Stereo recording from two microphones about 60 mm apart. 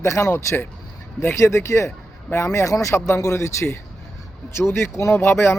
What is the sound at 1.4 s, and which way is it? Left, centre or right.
Speech, left.